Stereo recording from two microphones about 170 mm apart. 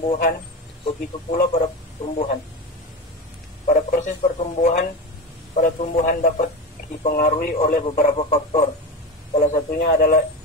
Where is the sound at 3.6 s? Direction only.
45° left (ahead or behind).